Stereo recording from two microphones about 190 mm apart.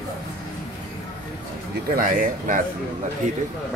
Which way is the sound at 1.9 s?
45° right (ahead or behind).